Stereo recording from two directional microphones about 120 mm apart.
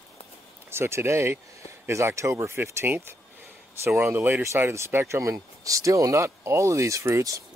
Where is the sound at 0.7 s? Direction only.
20° right (ahead or behind).